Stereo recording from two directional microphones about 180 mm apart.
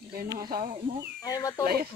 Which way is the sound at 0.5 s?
50° right (ahead or behind).